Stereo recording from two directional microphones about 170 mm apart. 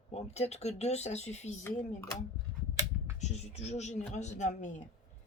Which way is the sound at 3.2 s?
40° left (ahead or behind).